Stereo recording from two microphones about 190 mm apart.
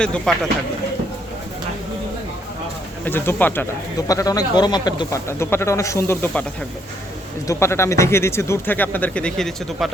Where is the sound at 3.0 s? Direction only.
10° left (ahead or behind).